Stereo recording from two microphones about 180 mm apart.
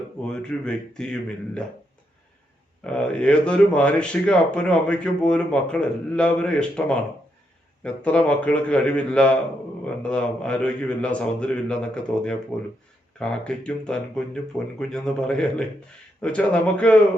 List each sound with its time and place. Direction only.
0.3 s speech: 5° left (ahead or behind)
2.8 s a man's voice: 5° left (ahead or behind)